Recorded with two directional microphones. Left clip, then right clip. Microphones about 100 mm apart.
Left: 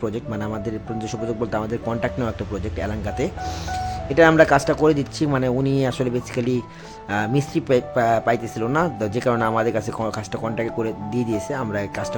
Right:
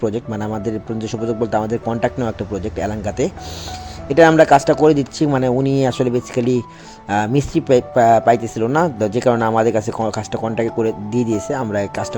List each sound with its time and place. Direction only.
0.0 s speech: 40° right (ahead or behind)